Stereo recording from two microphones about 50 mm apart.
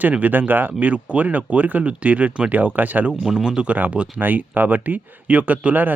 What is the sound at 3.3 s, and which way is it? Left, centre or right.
Speech, centre.